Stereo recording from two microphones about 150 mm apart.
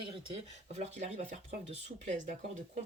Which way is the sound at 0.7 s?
45° right (ahead or behind).